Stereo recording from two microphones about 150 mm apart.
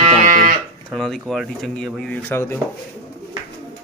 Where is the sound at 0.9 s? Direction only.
Centre (ahead or behind).